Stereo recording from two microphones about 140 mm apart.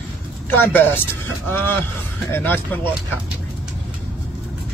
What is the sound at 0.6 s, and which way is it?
Speech, 15° left (ahead or behind).